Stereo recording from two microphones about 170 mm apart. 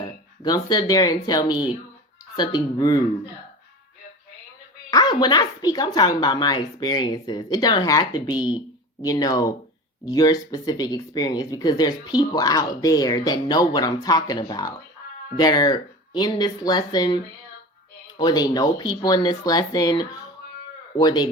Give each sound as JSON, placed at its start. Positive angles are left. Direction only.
{"t": 0.0, "sound": "speech", "side_deg": 25}
{"t": 4.9, "sound": "speech", "side_deg": 25}
{"t": 18.2, "sound": "speech", "side_deg": 25}